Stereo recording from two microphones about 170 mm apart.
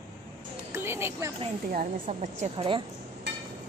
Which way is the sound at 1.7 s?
50° right (ahead or behind).